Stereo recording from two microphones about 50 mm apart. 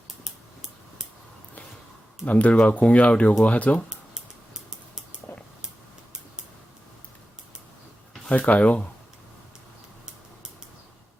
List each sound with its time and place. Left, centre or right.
2.2 s speech: left
5.3 s a sound: left
8.3 s speech: left